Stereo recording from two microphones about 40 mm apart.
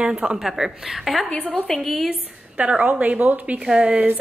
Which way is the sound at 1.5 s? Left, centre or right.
Centre.